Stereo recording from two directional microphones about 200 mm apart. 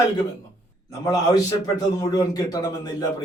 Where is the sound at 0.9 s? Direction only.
20° left (ahead or behind).